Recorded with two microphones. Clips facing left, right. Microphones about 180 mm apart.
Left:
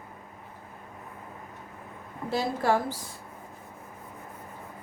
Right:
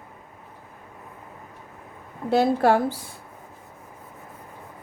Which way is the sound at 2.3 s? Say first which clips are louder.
Right 7 dB; 60° right (ahead or behind).